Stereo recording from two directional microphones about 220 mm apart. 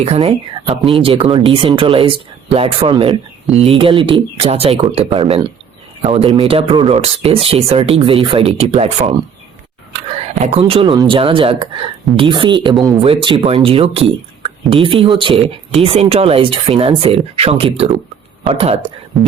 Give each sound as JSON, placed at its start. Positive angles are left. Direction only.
{"t": 0.0, "sound": "speech", "side_deg": -30}
{"t": 3.4, "sound": "speech", "side_deg": 0}
{"t": 3.8, "sound": "a man's voice", "side_deg": -25}
{"t": 10.2, "sound": "a sound", "side_deg": -30}
{"t": 10.6, "sound": "speech", "side_deg": -20}
{"t": 12.7, "sound": "speech", "side_deg": 0}
{"t": 13.0, "sound": "speech", "side_deg": -25}
{"t": 19.1, "sound": "speech", "side_deg": 0}